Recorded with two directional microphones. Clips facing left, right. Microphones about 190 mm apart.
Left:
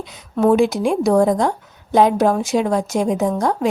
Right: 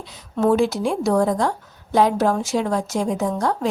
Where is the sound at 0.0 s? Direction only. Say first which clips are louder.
Left 3 dB; 15° left (ahead or behind).